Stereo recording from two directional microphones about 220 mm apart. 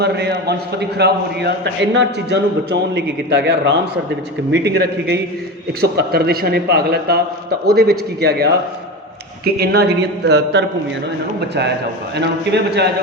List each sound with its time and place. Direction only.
0.0 s a man's voice: 50° right (ahead or behind)